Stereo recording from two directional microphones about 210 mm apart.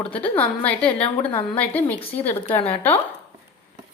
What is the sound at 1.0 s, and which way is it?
Speech, 25° left (ahead or behind).